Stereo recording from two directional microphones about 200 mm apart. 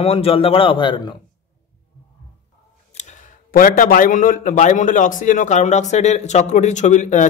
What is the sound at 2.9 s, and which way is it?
A man's voice, 35° left (ahead or behind).